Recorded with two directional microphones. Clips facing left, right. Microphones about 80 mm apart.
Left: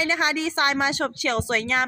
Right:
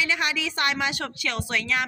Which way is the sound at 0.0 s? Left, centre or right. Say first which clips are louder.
Left 3 dB; left.